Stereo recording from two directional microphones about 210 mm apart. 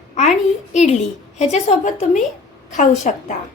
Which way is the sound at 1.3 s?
35° left (ahead or behind).